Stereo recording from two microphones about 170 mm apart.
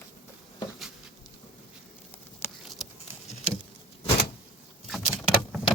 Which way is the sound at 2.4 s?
15° left (ahead or behind).